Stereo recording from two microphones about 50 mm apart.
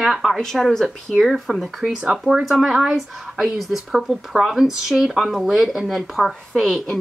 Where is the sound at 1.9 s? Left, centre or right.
Right.